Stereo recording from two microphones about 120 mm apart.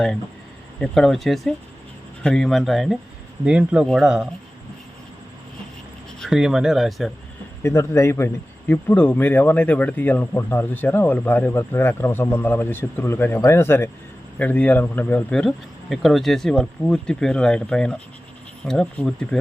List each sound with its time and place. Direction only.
0.8 s speech: 5° left (ahead or behind)
6.1 s speech: centre (ahead or behind)
7.6 s a man's voice: 25° left (ahead or behind); by 19.4 s 5° left (ahead or behind)